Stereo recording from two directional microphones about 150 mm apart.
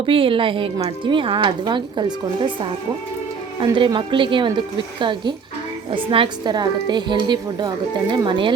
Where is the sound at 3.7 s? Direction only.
35° right (ahead or behind).